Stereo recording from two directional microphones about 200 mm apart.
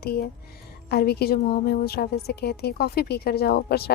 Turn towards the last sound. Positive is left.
turn(degrees=50)  # may be behind; listen again after turning